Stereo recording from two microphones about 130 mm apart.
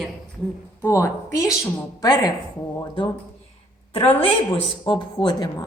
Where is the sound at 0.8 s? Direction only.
20° left (ahead or behind).